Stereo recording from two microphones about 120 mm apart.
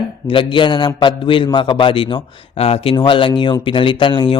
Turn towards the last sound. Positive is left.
turn(degrees=45)  # may be behind; listen again after turning